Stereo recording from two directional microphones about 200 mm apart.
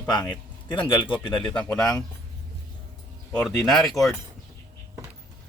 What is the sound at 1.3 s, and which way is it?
Speech, 5° left (ahead or behind).